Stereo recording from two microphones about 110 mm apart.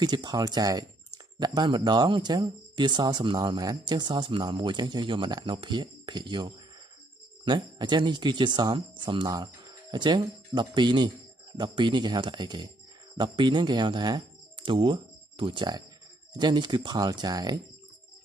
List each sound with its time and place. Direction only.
0.0 s speech: 40° right (ahead or behind)
7.4 s speech: 45° right (ahead or behind)